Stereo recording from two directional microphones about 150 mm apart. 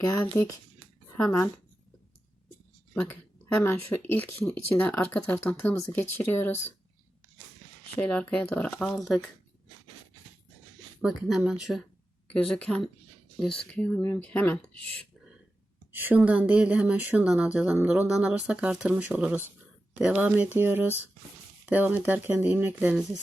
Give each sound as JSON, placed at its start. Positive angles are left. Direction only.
{"t": 0.1, "sound": "speech", "side_deg": 20}
{"t": 2.9, "sound": "a sound", "side_deg": 15}
{"t": 3.8, "sound": "speech", "side_deg": 15}
{"t": 7.9, "sound": "speech", "side_deg": 10}
{"t": 11.0, "sound": "speech", "side_deg": -5}
{"t": 15.9, "sound": "speech", "side_deg": -10}